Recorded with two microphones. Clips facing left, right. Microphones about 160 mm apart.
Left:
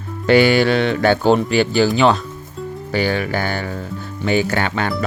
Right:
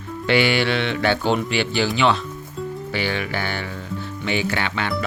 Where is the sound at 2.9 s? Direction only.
40° left (ahead or behind).